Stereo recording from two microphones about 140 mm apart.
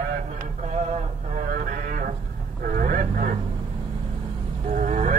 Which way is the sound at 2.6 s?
80° right.